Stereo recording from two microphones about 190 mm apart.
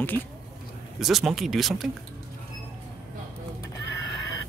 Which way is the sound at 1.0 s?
Centre (ahead or behind).